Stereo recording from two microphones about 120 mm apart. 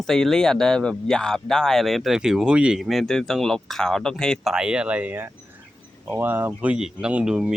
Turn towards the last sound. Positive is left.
turn(degrees=-5)  # may be behind; listen again after turning